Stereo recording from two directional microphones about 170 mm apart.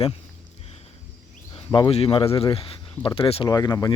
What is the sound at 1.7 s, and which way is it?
Speech, 25° left (ahead or behind).